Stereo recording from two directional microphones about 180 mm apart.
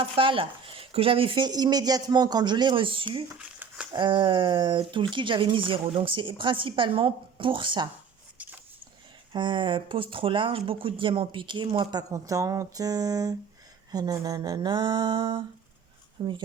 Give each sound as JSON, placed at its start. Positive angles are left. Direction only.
{"t": 0.0, "sound": "speech", "side_deg": -30}
{"t": 3.3, "sound": "crumpling", "side_deg": -5}
{"t": 3.9, "sound": "speech", "side_deg": -25}
{"t": 8.4, "sound": "a sound", "side_deg": -10}
{"t": 9.3, "sound": "speech", "side_deg": -25}